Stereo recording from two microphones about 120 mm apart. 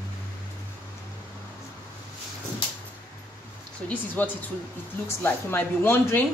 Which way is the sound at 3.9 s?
15° left (ahead or behind).